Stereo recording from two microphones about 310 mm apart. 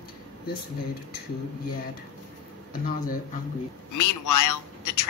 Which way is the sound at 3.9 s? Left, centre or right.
Left.